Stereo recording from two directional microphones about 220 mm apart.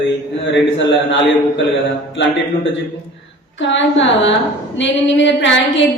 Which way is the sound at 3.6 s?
55° left (ahead or behind).